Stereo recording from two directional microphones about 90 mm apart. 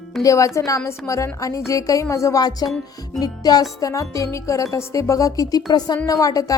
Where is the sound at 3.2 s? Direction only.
45° left (ahead or behind).